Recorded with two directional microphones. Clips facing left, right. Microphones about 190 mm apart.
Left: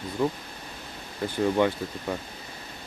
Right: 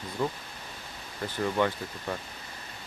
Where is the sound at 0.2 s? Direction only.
15° left (ahead or behind).